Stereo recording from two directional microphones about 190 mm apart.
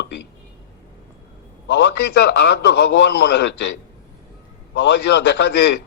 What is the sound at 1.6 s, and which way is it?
A man's voice, 65° left (ahead or behind).